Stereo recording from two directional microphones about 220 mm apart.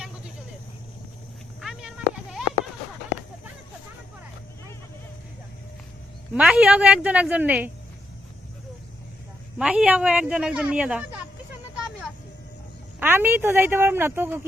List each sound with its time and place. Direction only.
1.6 s a sound: centre (ahead or behind)
6.3 s a woman's voice: 5° right (ahead or behind)
9.6 s speech: 5° right (ahead or behind)
13.0 s a woman's voice: 10° right (ahead or behind)